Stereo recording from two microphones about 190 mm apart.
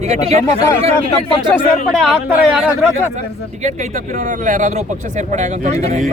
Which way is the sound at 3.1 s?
40° right (ahead or behind).